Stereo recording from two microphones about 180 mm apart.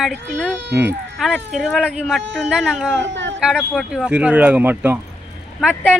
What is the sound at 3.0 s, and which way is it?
Speech, 90° right.